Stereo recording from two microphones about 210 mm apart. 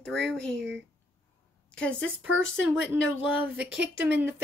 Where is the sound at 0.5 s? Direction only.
60° right (ahead or behind).